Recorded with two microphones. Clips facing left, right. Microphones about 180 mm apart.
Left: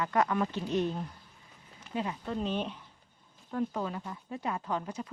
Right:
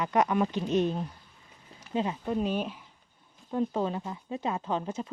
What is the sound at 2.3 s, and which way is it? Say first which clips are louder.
Speech: right 3 dB; 10° right (ahead or behind).